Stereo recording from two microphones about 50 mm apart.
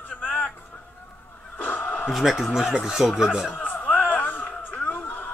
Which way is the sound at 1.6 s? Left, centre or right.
Left.